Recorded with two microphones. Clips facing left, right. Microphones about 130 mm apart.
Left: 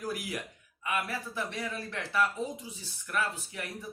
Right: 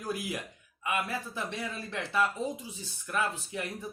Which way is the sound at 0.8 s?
25° right (ahead or behind).